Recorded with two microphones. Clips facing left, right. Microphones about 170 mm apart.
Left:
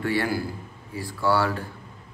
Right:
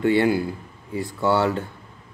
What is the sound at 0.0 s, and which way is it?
A man's voice, 20° right (ahead or behind).